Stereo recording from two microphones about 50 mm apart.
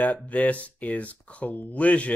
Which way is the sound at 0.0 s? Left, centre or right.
Left.